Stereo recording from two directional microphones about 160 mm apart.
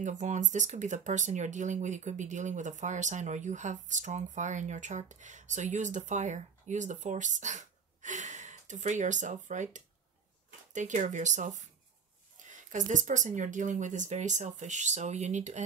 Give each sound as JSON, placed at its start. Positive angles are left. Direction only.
{"t": 0.0, "sound": "speech", "side_deg": -50}